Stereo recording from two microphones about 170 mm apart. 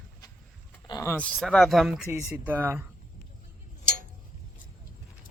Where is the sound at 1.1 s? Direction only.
5° left (ahead or behind); by 2.9 s 10° right (ahead or behind).